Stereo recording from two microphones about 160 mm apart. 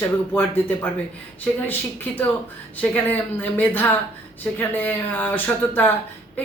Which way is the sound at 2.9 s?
10° left (ahead or behind).